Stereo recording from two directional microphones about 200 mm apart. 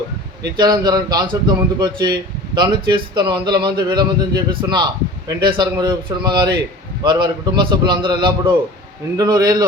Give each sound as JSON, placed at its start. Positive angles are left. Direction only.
{"t": 0.4, "sound": "speech", "side_deg": -20}